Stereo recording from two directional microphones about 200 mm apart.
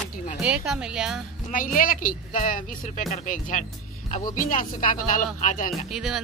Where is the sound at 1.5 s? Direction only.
45° left (ahead or behind).